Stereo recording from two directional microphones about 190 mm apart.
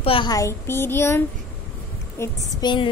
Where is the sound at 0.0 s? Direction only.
25° left (ahead or behind).